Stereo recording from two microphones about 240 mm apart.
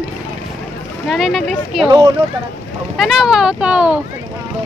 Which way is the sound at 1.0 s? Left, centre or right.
Centre.